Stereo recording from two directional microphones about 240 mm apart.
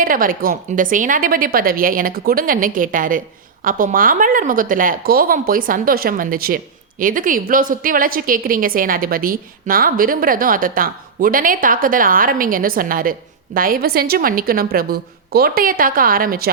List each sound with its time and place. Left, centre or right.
0.0 s a woman's voice: right